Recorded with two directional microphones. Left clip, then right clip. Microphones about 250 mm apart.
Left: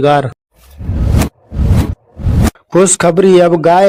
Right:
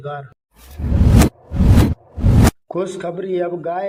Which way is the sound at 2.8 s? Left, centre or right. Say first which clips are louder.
Left 14 dB; left.